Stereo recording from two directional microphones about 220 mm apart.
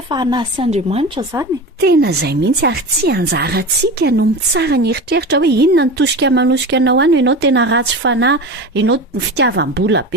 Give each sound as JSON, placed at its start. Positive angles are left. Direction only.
{"t": 0.1, "sound": "a woman's voice", "side_deg": -20}
{"t": 1.8, "sound": "a woman's voice", "side_deg": -45}